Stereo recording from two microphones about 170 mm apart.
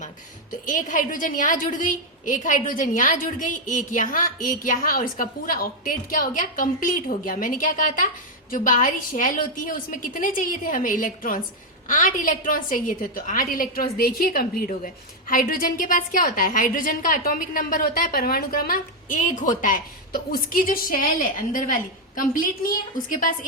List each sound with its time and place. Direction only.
0.6 s a woman's voice: 50° left (ahead or behind)